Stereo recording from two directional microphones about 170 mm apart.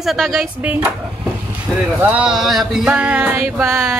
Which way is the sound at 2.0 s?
5° right (ahead or behind).